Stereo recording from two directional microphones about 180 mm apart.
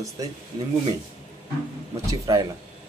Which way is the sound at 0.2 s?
20° right (ahead or behind).